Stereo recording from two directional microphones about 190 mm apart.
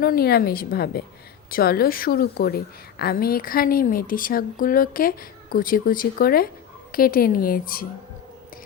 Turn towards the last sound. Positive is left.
turn(degrees=50)  # may be behind; listen again after turning